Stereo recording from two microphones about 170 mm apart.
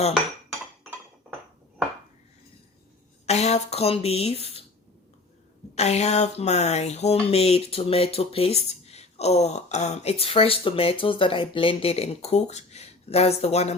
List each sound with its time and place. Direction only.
3.2 s speech: 40° left (ahead or behind)
5.7 s speech: 40° left (ahead or behind)